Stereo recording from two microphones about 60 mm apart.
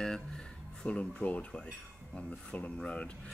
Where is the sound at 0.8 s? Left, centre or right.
Left.